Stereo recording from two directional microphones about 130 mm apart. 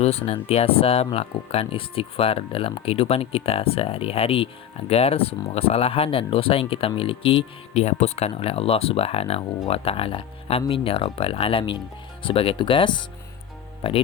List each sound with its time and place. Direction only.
0.0 s speech: 50° left (ahead or behind)